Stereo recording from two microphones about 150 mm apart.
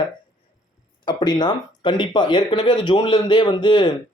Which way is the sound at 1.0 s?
30° left (ahead or behind).